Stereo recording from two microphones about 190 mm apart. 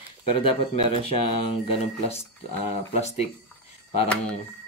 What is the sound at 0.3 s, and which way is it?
Speech, 30° left (ahead or behind).